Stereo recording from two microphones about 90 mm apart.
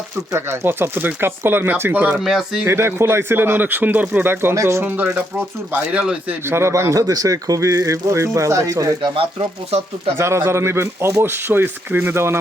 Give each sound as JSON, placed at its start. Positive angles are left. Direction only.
{"t": 0.3, "sound": "a man's voice", "side_deg": -30}
{"t": 2.1, "sound": "speech", "side_deg": -5}
{"t": 2.6, "sound": "a man's voice", "side_deg": -30}
{"t": 5.4, "sound": "speech", "side_deg": -15}
{"t": 6.4, "sound": "a man's voice", "side_deg": -30}
{"t": 7.1, "sound": "speech", "side_deg": -40}
{"t": 9.0, "sound": "speech", "side_deg": -70}
{"t": 10.2, "sound": "a man's voice", "side_deg": -30}